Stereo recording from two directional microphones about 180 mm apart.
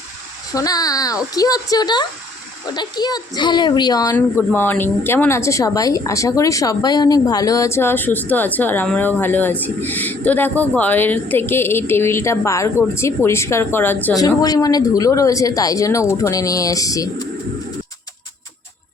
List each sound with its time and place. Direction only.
0.5 s speech: 20° left (ahead or behind)